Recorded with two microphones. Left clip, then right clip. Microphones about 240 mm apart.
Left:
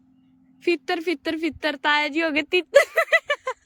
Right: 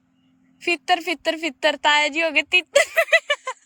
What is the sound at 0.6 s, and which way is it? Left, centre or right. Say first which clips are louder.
A woman's voice: right 3 dB; centre.